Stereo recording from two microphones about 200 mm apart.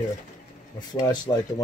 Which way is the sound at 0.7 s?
20° left (ahead or behind).